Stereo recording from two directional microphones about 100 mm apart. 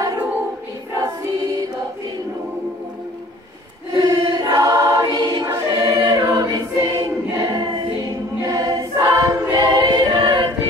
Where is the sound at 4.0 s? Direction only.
40° right (ahead or behind).